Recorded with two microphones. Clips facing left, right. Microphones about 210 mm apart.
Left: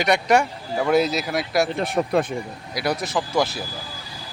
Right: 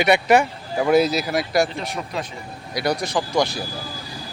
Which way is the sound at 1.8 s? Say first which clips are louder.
Left 8 dB; 55° left (ahead or behind).